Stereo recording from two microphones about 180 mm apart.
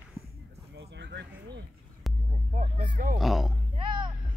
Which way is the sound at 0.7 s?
75° right (ahead or behind).